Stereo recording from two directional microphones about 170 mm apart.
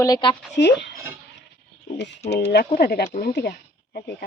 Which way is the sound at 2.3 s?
80° left.